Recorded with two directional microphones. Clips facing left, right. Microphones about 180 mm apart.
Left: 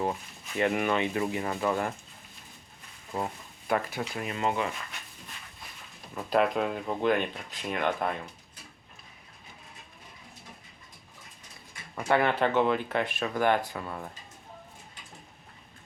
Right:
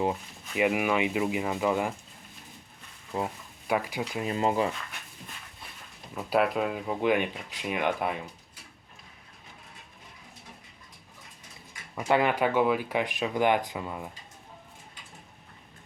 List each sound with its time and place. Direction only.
0.0 s speech: 10° right (ahead or behind)
3.2 s speech: 10° right (ahead or behind)
4.3 s speech: 35° right (ahead or behind)
6.1 s speech: 5° right (ahead or behind)
11.9 s speech: 15° right (ahead or behind)